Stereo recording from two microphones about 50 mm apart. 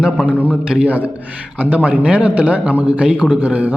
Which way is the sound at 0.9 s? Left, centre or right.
Right.